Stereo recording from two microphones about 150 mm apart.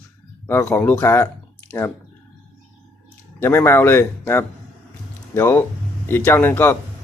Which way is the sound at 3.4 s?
15° left (ahead or behind).